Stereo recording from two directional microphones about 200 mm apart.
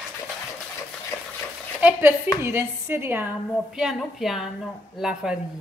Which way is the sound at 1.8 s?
10° right (ahead or behind).